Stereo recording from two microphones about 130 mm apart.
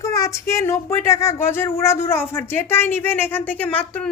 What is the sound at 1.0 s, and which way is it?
A woman's voice, 20° left (ahead or behind).